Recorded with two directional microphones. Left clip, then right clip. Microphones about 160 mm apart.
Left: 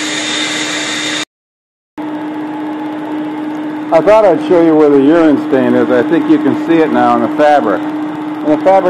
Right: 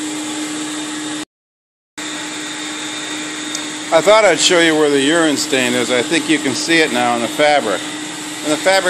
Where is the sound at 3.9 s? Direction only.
45° right (ahead or behind).